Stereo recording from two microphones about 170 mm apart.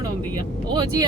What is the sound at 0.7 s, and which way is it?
Speech, 25° right (ahead or behind).